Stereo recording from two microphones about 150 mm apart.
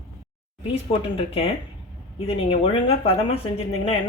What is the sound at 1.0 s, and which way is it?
Speech, 40° left (ahead or behind).